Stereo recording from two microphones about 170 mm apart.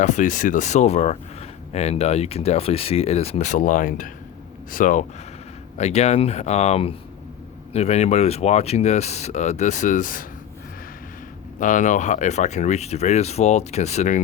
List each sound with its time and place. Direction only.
0.0 s speech: 45° left (ahead or behind)
5.7 s speech: 40° left (ahead or behind)
11.6 s speech: 50° left (ahead or behind)